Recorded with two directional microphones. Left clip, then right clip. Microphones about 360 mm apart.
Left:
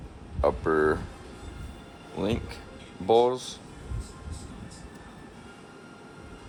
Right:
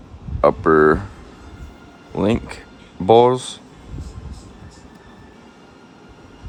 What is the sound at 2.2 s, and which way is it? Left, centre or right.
Speech, right.